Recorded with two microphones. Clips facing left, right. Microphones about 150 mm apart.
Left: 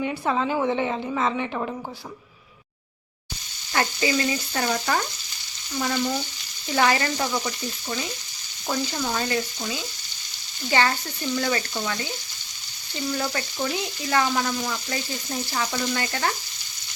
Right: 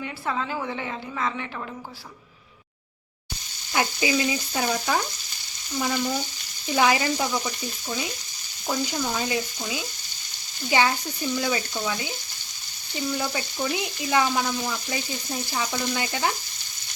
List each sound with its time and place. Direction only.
0.0 s a woman's voice: 20° left (ahead or behind)
3.7 s frying: 10° right (ahead or behind)